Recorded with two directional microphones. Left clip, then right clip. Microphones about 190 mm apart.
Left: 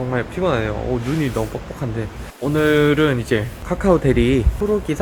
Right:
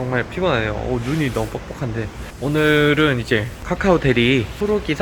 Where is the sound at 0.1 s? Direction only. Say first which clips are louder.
Right 1 dB; 10° left (ahead or behind).